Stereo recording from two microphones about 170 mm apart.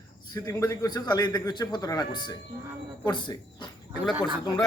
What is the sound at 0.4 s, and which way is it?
A man's voice, 20° left (ahead or behind).